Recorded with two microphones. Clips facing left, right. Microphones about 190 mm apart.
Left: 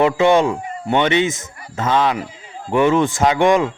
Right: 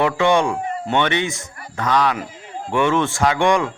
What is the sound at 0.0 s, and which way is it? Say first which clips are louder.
Speech: left 3 dB; 20° left (ahead or behind).